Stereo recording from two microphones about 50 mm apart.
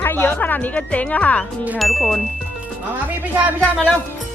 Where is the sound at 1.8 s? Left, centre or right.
Centre.